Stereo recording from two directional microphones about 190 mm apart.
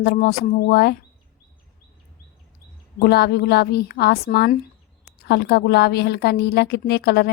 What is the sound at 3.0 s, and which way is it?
A woman's voice, 60° left (ahead or behind).